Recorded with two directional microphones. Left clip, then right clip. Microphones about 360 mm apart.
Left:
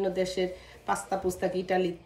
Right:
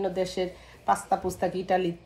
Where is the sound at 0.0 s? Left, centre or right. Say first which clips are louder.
Even; centre.